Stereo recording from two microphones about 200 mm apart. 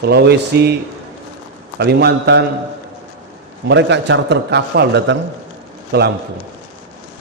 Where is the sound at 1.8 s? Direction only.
55° right (ahead or behind).